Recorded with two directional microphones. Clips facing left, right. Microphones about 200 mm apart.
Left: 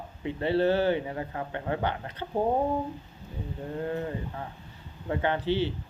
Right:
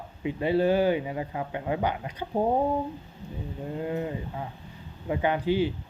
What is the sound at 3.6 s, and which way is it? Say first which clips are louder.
Speech: right 1 dB; 15° right (ahead or behind).